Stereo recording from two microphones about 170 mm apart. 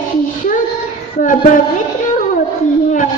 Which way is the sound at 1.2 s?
50° left (ahead or behind).